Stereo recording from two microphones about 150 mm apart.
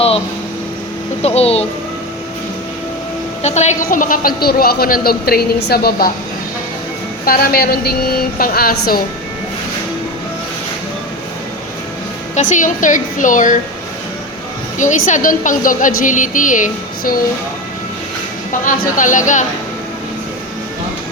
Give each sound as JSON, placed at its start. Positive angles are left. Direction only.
{"t": 1.2, "sound": "speech", "side_deg": 45}
{"t": 3.4, "sound": "speech", "side_deg": 50}
{"t": 3.8, "sound": "a woman's voice", "side_deg": 65}
{"t": 7.3, "sound": "a woman's voice", "side_deg": 85}
{"t": 8.4, "sound": "speech", "side_deg": 80}
{"t": 12.3, "sound": "a woman's voice", "side_deg": 55}
{"t": 14.8, "sound": "a woman's voice", "side_deg": 55}
{"t": 18.6, "sound": "a woman's voice", "side_deg": 60}